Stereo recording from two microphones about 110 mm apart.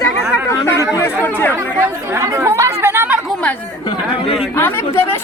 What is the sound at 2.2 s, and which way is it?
Speech, 25° right (ahead or behind).